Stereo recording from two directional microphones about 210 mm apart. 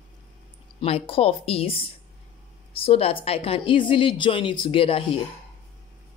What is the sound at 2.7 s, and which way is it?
A woman's voice, 25° left (ahead or behind).